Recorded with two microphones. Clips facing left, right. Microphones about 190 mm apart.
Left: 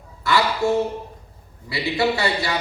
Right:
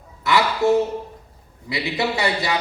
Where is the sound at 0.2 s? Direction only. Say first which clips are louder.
Right 1 dB; 20° right (ahead or behind).